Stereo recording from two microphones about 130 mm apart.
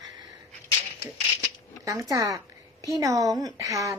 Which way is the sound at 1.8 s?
25° right (ahead or behind).